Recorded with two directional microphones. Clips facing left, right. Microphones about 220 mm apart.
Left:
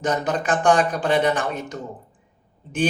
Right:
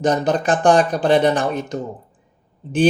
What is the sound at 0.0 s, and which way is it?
Speech, 35° right (ahead or behind).